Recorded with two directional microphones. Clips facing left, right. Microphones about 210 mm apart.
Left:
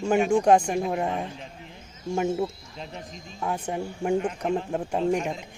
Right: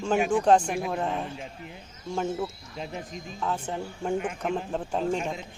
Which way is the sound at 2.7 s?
5° right (ahead or behind).